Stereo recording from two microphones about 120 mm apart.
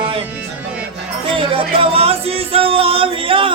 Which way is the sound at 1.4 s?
50° right (ahead or behind).